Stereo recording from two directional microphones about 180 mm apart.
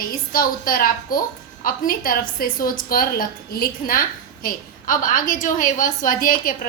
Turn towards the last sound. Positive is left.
turn(degrees=50)  # may be behind; listen again after turning